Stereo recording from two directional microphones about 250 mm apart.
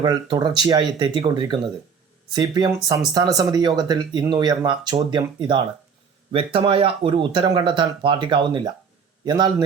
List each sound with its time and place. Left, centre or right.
0.0 s speech: centre